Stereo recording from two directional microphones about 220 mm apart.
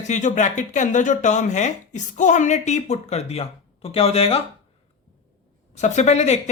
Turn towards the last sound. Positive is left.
turn(degrees=30)  # may be behind; listen again after turning